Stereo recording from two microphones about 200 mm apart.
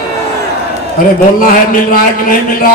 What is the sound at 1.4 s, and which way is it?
A man's voice, 45° left (ahead or behind).